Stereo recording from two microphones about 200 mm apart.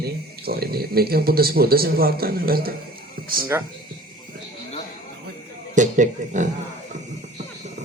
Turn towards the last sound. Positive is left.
turn(degrees=-40)  # may be behind; listen again after turning